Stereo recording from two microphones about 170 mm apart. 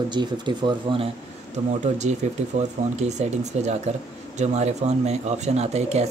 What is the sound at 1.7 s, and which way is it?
Speech, 45° right (ahead or behind).